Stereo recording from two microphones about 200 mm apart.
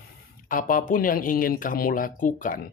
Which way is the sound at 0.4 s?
45° left (ahead or behind).